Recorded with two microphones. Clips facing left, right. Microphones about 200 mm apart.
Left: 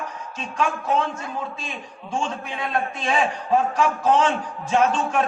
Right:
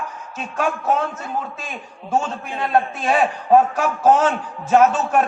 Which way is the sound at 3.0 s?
50° right (ahead or behind).